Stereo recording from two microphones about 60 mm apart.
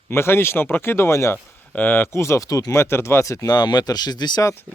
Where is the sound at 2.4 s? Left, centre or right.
Left.